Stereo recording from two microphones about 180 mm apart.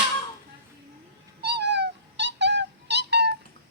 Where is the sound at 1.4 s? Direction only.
70° right (ahead or behind).